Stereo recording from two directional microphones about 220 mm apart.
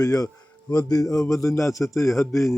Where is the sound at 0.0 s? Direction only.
15° left (ahead or behind).